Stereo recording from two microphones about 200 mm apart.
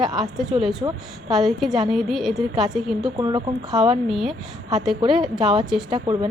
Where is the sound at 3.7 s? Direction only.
Centre (ahead or behind).